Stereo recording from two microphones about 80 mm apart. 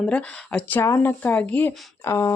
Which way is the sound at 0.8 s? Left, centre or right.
Left.